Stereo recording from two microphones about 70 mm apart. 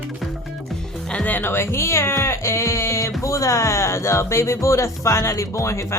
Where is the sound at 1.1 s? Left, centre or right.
Left.